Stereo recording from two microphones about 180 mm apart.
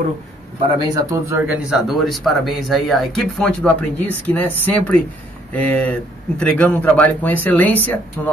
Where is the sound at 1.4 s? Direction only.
5° right (ahead or behind).